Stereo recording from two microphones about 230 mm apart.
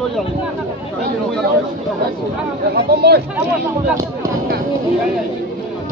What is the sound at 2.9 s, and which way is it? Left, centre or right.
Chatter, right.